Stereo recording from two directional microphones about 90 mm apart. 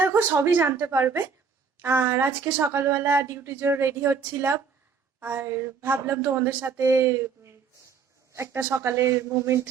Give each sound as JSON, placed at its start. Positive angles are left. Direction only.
{"t": 0.0, "sound": "a woman's voice", "side_deg": -25}